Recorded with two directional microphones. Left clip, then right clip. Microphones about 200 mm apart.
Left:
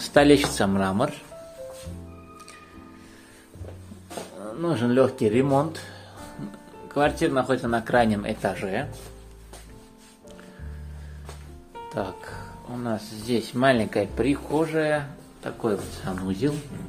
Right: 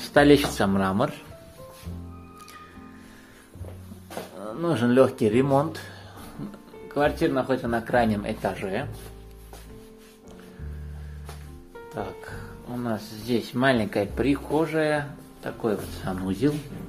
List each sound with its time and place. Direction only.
0.1 s speech: centre (ahead or behind)
4.4 s speech: centre (ahead or behind); by 8.8 s 15° left (ahead or behind)
12.0 s speech: 25° left (ahead or behind)
12.7 s speech: centre (ahead or behind)